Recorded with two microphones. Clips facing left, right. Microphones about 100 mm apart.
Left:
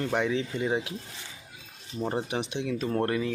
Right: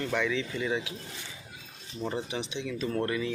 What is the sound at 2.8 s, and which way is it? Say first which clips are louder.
Speech: left 2 dB; 40° left (ahead or behind).